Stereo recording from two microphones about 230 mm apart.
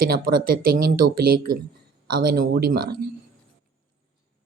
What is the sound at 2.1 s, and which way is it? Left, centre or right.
Speech, right.